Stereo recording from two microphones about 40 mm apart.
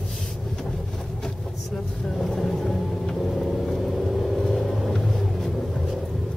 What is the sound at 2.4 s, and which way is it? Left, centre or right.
Vehicle, centre.